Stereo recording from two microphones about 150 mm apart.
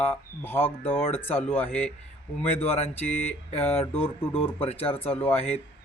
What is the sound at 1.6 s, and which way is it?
Speech, 45° left (ahead or behind).